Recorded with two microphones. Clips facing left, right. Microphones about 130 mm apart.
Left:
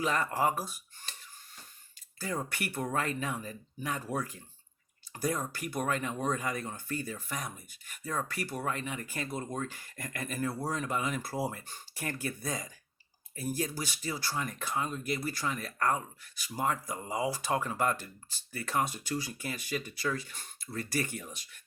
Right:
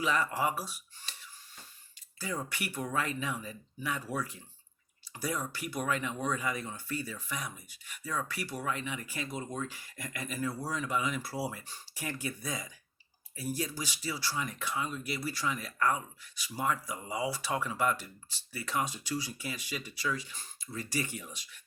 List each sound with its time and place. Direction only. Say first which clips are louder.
0.0 s speech: left 1 dB; 50° left (ahead or behind)